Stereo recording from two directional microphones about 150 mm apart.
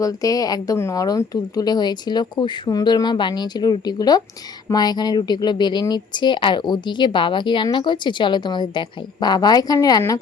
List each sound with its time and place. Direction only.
0.0 s speech: 25° left (ahead or behind)